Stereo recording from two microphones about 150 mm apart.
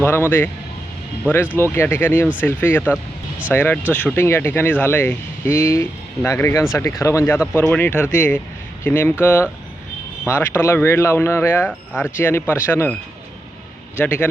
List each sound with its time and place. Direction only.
0.0 s speech: 15° left (ahead or behind)
1.5 s speech: 15° left (ahead or behind)
2.9 s a sound: 10° right (ahead or behind)
3.5 s speech: 15° left (ahead or behind)
10.2 s speech: 15° left (ahead or behind)
14.0 s speech: 10° left (ahead or behind)